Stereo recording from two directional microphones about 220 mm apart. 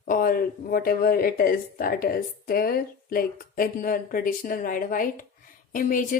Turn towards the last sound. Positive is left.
turn(degrees=40)  # may be behind; listen again after turning